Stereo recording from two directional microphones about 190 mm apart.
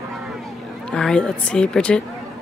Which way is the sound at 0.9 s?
5° left (ahead or behind).